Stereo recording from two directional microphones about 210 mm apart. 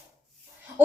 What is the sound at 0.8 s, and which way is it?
Speech, 10° right (ahead or behind).